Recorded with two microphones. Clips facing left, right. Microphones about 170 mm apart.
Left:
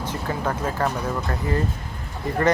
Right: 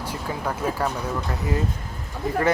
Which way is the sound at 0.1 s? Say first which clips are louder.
Left 2 dB; 10° right (ahead or behind).